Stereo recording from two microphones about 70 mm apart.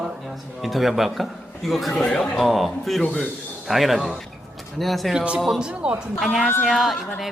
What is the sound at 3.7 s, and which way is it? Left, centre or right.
A woman's voice, centre.